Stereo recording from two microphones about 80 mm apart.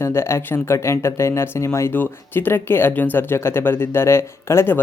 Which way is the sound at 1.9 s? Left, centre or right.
Left.